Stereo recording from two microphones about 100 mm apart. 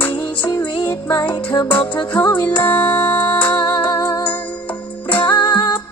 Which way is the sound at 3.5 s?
45° left (ahead or behind).